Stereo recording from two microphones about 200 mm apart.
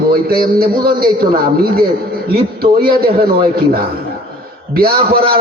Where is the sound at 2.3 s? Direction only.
50° right (ahead or behind).